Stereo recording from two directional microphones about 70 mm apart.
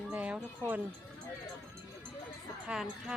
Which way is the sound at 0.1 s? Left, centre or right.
Right.